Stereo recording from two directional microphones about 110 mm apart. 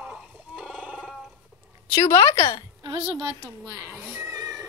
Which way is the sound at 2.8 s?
40° right (ahead or behind).